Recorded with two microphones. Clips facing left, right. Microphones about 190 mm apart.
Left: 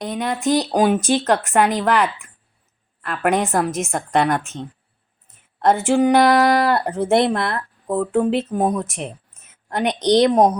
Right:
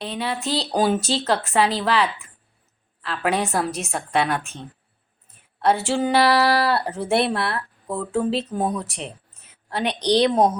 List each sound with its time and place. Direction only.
0.0 s speech: 15° left (ahead or behind)
3.1 s speech: 15° left (ahead or behind)
5.6 s a woman's voice: 15° left (ahead or behind)